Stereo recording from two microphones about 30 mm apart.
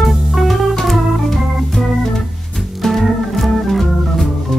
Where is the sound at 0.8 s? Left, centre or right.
Centre.